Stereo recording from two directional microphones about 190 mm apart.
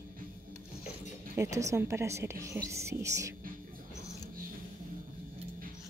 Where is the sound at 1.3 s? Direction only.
15° right (ahead or behind).